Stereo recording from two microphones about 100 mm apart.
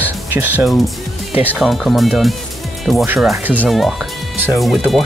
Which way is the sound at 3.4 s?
15° right (ahead or behind).